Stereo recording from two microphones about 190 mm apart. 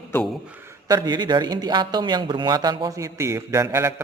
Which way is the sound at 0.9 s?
20° right (ahead or behind).